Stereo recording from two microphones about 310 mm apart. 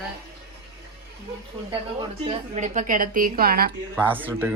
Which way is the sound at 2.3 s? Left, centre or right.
Right.